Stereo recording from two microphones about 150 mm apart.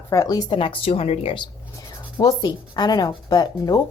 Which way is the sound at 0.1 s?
20° left (ahead or behind).